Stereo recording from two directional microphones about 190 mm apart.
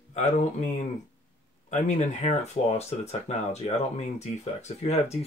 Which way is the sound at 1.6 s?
40° left (ahead or behind).